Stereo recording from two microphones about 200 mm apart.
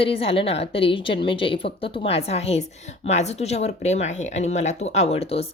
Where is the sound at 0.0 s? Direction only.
30° left (ahead or behind).